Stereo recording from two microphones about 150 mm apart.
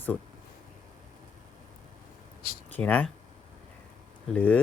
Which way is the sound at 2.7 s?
10° left (ahead or behind).